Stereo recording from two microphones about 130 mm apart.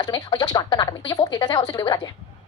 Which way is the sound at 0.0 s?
30° left (ahead or behind).